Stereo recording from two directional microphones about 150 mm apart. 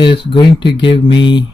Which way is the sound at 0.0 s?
30° left (ahead or behind).